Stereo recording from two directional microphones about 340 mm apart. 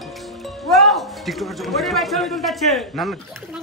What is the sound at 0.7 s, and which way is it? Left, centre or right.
Speech, centre.